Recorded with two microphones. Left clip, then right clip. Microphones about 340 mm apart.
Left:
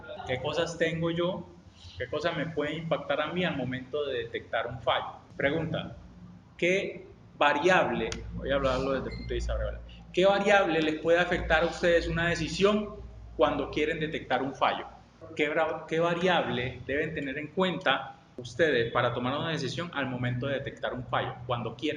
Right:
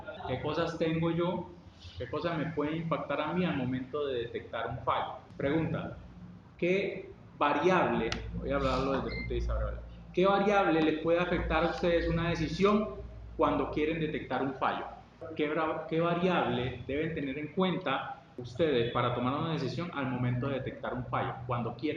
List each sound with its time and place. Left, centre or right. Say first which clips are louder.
0.3 s speech: left 3 dB; left
6.6 s speech: left 3 dB; left